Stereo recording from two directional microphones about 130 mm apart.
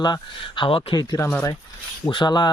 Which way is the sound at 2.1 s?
35° left (ahead or behind).